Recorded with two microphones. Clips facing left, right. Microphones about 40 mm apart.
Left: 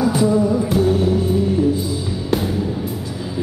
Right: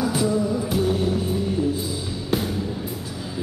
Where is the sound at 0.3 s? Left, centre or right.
Centre.